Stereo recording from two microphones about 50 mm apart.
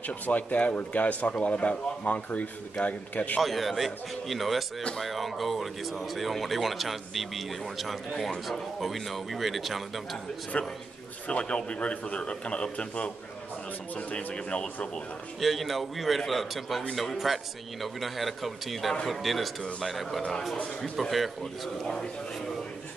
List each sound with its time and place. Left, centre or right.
0.0 s a man's voice: left
3.3 s speech: centre
10.5 s a man's voice: left
15.4 s speech: centre